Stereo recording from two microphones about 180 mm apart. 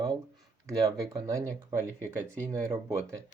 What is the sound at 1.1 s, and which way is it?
Speech, 15° right (ahead or behind).